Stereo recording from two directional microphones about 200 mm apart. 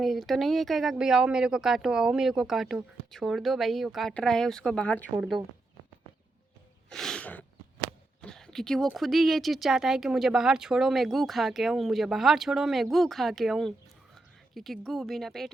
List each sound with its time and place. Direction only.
0.0 s speech: centre (ahead or behind)
6.9 s speech: 5° left (ahead or behind)